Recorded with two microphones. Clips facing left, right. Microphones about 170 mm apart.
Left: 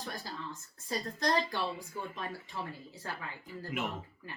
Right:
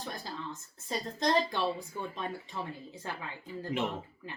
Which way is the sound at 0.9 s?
20° right (ahead or behind).